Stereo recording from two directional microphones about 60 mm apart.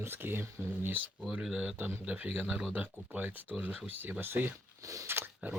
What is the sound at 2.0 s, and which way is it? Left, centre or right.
Speech, right.